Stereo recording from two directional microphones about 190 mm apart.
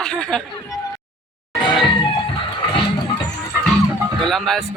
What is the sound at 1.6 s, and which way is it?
Music, 25° left (ahead or behind).